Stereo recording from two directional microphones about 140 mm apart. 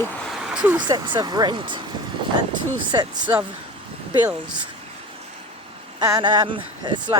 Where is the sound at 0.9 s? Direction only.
30° right (ahead or behind).